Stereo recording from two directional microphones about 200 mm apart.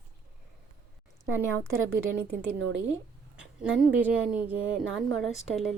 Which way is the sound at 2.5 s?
70° right (ahead or behind).